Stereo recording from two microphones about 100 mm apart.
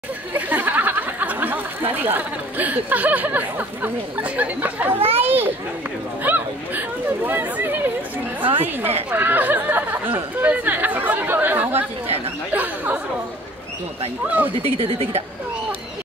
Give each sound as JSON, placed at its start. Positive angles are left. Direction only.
{"t": 0.3, "sound": "a child's voice", "side_deg": -20}
{"t": 8.5, "sound": "a woman's voice", "side_deg": -80}
{"t": 9.1, "sound": "speech", "side_deg": -20}
{"t": 12.5, "sound": "chatter", "side_deg": -15}
{"t": 14.2, "sound": "speech", "side_deg": -15}
{"t": 14.5, "sound": "speech", "side_deg": -70}